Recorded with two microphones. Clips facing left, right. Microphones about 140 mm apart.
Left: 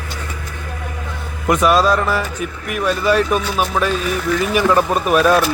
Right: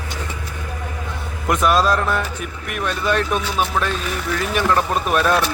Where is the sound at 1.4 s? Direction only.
Centre (ahead or behind).